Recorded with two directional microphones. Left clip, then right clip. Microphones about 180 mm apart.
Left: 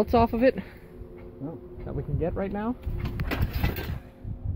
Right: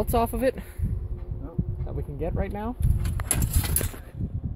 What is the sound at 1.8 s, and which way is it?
Speech, 35° right (ahead or behind).